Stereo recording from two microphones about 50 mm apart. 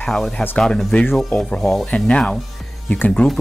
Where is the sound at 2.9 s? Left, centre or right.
Left.